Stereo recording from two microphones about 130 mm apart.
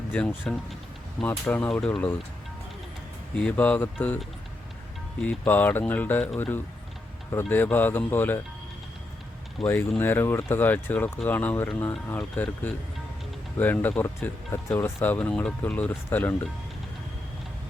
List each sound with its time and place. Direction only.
0.1 s speech: 10° left (ahead or behind)
3.3 s speech: 10° left (ahead or behind)
5.2 s speech: 10° left (ahead or behind)
9.6 s speech: centre (ahead or behind)
10.0 s speech: 15° left (ahead or behind)